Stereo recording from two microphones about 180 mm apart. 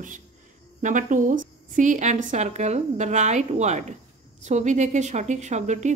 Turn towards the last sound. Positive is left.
turn(degrees=-40)  # may be behind; listen again after turning